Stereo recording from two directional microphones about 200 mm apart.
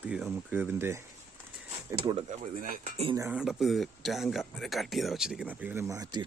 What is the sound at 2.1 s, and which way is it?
Speech, 35° right (ahead or behind).